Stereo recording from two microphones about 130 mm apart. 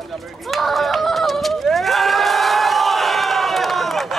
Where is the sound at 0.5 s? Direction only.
Centre (ahead or behind).